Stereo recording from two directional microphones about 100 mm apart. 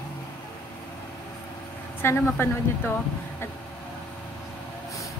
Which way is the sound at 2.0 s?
25° left (ahead or behind).